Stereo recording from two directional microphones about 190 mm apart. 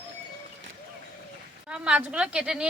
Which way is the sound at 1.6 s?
5° right (ahead or behind).